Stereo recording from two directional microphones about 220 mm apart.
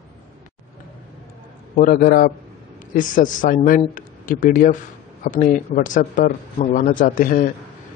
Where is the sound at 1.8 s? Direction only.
40° left (ahead or behind).